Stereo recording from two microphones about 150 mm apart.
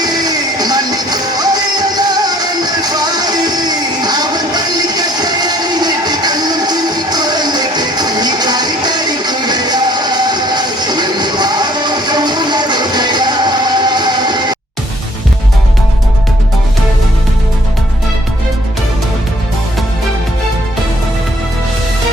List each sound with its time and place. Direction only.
0.0 s music: 25° right (ahead or behind)